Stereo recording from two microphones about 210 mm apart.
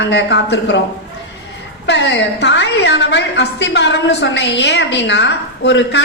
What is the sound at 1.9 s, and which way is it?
A woman's voice, 55° left (ahead or behind).